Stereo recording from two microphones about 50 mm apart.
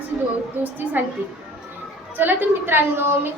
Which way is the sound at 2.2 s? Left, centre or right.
Right.